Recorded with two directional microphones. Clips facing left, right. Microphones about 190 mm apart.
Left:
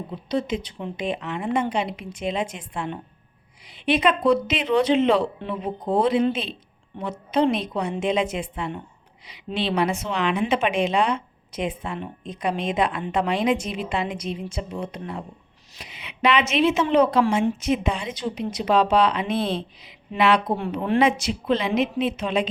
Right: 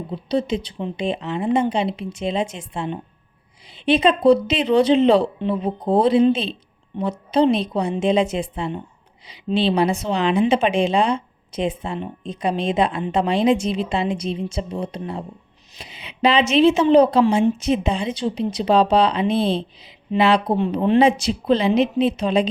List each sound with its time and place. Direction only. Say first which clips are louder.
0.1 s a woman's voice: right 4 dB; 30° right (ahead or behind)